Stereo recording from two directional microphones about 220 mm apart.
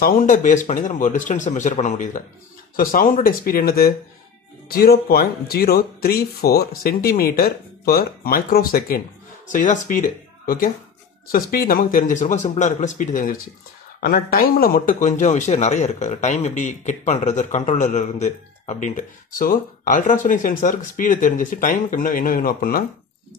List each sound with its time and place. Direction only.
0.0 s speech: 35° left (ahead or behind)